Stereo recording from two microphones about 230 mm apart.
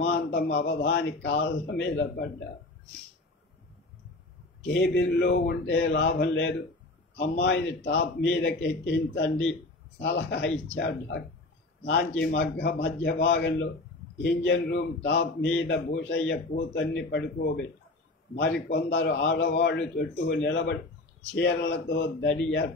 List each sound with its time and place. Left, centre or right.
0.0 s a man's voice: left
4.6 s a man's voice: left